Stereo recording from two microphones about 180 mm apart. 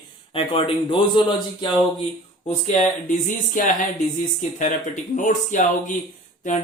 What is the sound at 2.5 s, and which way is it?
Speech, 40° left (ahead or behind).